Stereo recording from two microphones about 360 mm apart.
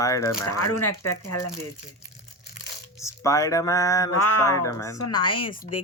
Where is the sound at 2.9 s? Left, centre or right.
Centre.